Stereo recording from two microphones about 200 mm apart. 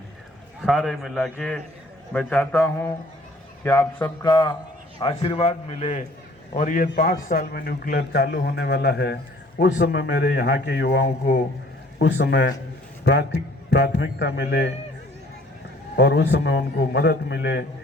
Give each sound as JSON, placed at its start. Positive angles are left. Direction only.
{"t": 0.6, "sound": "a man's voice", "side_deg": 5}
{"t": 4.3, "sound": "a man's voice", "side_deg": 25}
{"t": 6.8, "sound": "a man's voice", "side_deg": 50}
{"t": 16.0, "sound": "a man's voice", "side_deg": 55}